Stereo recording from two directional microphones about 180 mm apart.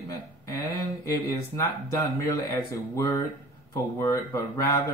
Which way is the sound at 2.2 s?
15° left (ahead or behind).